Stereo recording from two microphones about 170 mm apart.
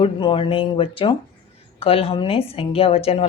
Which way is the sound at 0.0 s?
30° left (ahead or behind).